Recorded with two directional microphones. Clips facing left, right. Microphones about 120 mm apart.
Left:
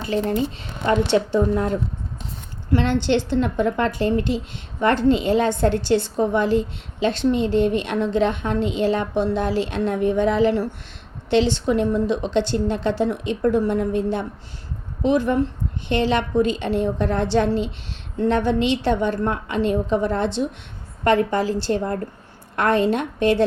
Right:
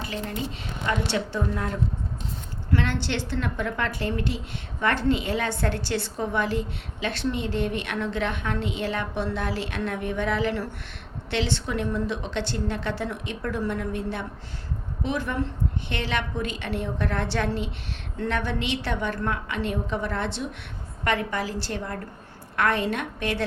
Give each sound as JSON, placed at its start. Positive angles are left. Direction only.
{"t": 0.0, "sound": "a woman's voice", "side_deg": 35}